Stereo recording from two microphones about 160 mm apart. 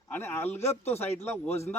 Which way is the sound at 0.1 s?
15° left (ahead or behind).